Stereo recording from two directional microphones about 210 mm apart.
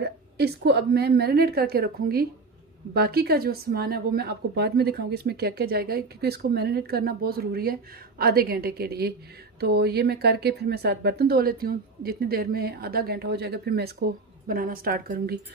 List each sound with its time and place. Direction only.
0.0 s a woman's voice: 50° right (ahead or behind)